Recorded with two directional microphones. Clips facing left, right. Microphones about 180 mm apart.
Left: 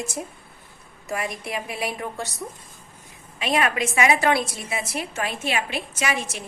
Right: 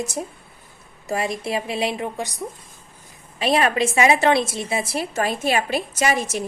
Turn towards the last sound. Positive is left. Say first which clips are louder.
# right 5 dB
turn(degrees=-40)  # may be behind; listen again after turning